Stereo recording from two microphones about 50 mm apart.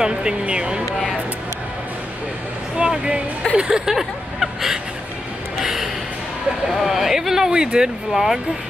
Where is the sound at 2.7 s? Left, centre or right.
Right.